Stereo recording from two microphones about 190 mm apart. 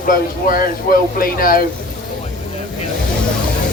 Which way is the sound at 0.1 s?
50° left (ahead or behind).